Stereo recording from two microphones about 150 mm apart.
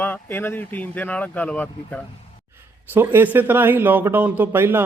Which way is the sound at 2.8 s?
15° right (ahead or behind).